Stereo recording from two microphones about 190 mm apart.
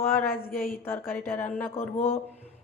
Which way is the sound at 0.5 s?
50° left (ahead or behind).